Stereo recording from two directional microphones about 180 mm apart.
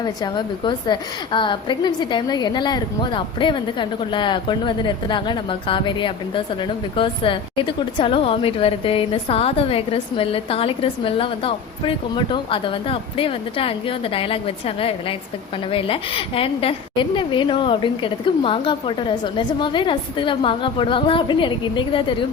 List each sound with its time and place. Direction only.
0.0 s a woman's voice: 25° left (ahead or behind)